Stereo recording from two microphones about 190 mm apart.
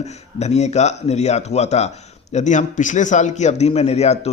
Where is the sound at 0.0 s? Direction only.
35° left (ahead or behind).